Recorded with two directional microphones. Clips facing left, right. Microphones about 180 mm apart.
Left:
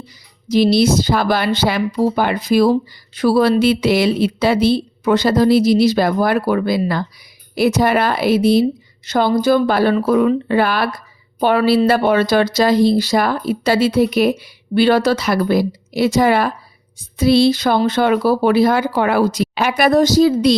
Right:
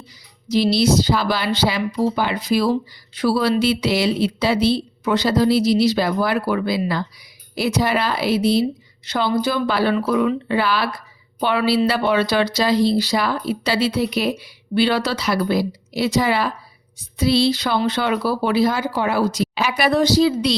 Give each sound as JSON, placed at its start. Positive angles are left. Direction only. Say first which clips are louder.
{"t": 0.4, "sound": "speech", "louder": "left 4 dB", "side_deg": 50}